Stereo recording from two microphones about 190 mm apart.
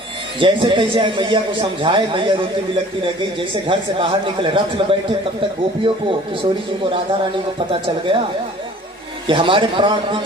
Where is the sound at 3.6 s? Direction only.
25° right (ahead or behind).